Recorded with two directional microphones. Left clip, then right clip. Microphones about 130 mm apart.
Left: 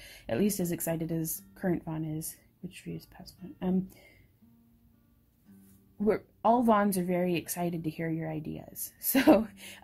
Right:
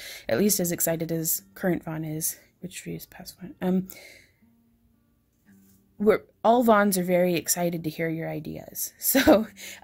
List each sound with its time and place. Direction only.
0.0 s speech: 45° right (ahead or behind)
5.9 s speech: 40° right (ahead or behind)